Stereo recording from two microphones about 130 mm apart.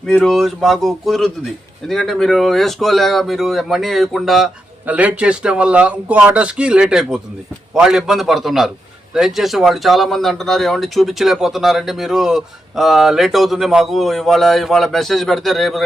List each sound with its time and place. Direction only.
0.0 s speech: 5° left (ahead or behind)
4.9 s speech: 10° right (ahead or behind)